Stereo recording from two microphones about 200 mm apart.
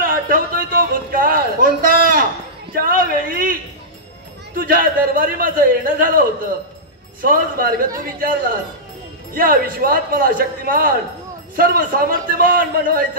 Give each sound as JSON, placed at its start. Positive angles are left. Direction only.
{"t": 0.0, "sound": "a sound", "side_deg": -45}
{"t": 2.7, "sound": "a man's voice", "side_deg": -45}
{"t": 4.6, "sound": "a man's voice", "side_deg": -45}